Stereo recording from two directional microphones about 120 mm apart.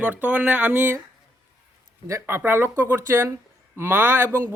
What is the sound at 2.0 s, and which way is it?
Speech, 20° right (ahead or behind).